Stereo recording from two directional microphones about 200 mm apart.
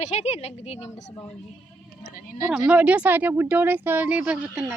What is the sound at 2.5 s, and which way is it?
Speech, 5° right (ahead or behind).